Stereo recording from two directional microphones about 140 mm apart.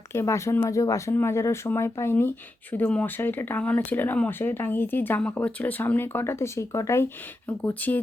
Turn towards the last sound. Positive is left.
turn(degrees=10)  # may be behind; listen again after turning